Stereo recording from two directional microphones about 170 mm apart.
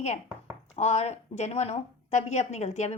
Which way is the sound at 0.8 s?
40° left (ahead or behind).